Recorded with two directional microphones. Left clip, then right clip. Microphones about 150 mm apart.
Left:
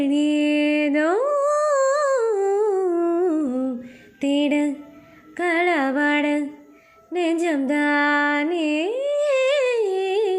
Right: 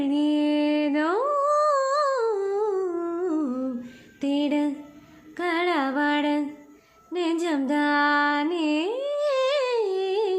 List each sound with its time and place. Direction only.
0.0 s a sound: 20° left (ahead or behind)
5.4 s female singing: 20° left (ahead or behind)
7.1 s music: 15° left (ahead or behind)